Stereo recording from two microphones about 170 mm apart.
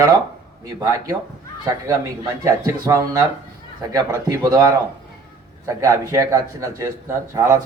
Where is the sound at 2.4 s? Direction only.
20° right (ahead or behind).